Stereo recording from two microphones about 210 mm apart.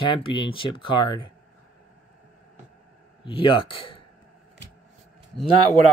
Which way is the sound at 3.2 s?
25° left (ahead or behind).